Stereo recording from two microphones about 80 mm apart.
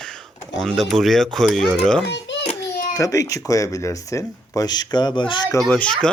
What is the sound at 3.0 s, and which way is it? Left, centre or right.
Speech, left.